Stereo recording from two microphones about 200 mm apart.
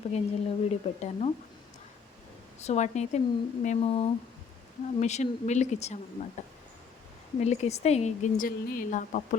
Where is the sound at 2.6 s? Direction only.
35° left (ahead or behind).